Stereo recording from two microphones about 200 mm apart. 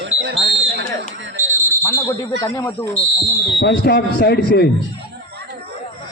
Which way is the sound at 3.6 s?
50° left (ahead or behind).